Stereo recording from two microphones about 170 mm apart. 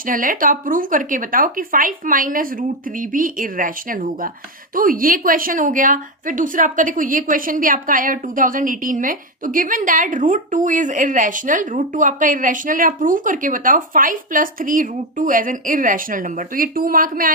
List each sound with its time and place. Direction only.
0.0 s a woman's voice: 55° right (ahead or behind)